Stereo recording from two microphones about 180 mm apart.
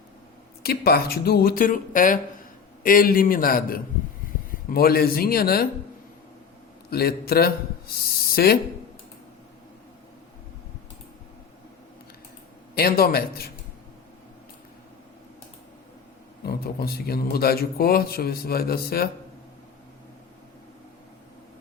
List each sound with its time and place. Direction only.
0.6 s a man's voice: 60° left (ahead or behind)
6.9 s a man's voice: 60° left (ahead or behind)
12.7 s a man's voice: 55° left (ahead or behind)
16.5 s a man's voice: 60° left (ahead or behind)